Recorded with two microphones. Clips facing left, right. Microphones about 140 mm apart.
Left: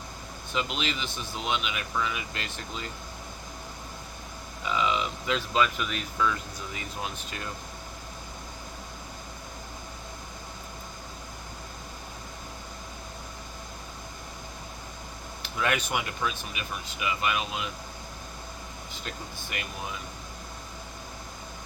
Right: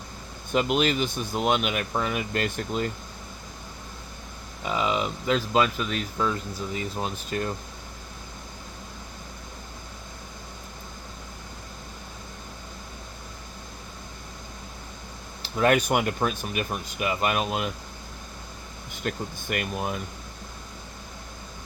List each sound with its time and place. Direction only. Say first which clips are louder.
0.5 s speech: right 8 dB; 50° right (ahead or behind)
4.6 s speech: right 2 dB; 40° right (ahead or behind)
15.4 s speech: right 7 dB; 35° right (ahead or behind)
19.0 s speech: right 10 dB; 50° right (ahead or behind)